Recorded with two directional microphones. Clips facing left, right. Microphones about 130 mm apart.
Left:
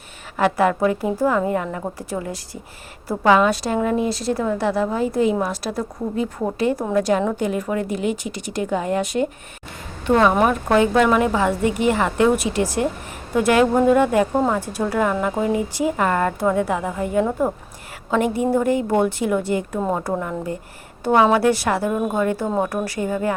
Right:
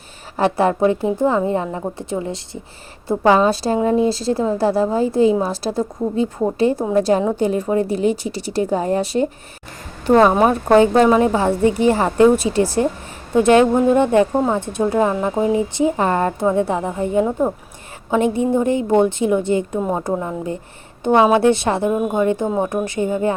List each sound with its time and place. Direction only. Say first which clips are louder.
0.3 s a woman's voice: right 2 dB; 30° right (ahead or behind)